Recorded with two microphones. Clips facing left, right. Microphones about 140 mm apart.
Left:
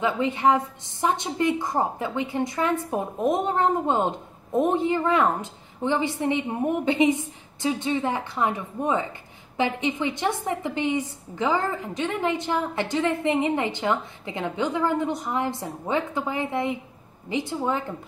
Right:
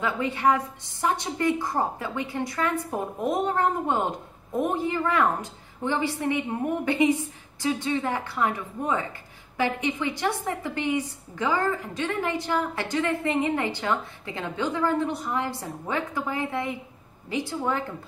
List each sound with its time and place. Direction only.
0.0 s a woman's voice: 20° left (ahead or behind)